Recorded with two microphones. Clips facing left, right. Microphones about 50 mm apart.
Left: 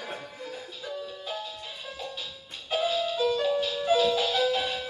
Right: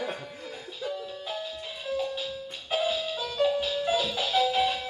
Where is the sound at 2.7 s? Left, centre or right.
Centre.